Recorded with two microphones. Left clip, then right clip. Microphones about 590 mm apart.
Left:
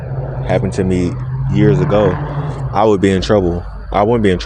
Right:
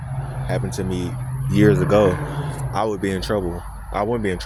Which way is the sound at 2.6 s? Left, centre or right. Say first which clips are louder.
Left 11 dB; right.